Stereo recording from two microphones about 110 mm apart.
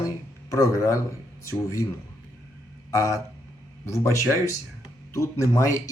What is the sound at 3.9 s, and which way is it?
Speech, 25° left (ahead or behind).